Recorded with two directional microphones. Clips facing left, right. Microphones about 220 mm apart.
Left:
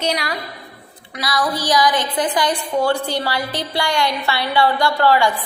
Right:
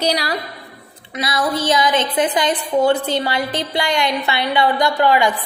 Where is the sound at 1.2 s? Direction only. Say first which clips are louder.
Right 2 dB; 25° right (ahead or behind).